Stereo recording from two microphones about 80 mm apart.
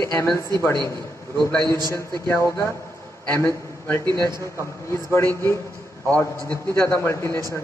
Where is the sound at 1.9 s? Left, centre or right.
Left.